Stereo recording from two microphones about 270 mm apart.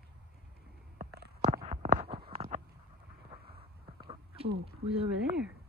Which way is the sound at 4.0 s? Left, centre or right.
Centre.